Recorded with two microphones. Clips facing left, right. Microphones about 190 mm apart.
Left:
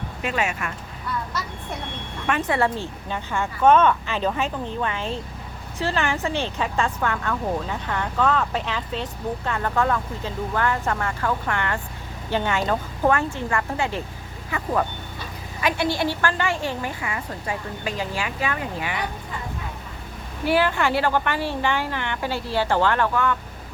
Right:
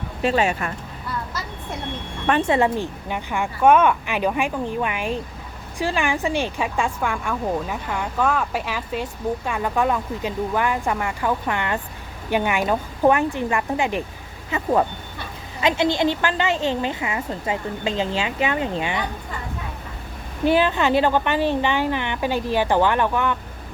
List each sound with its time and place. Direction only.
0.2 s speech: 30° right (ahead or behind)
2.2 s a woman's voice: 30° right (ahead or behind)
20.4 s speech: 20° right (ahead or behind)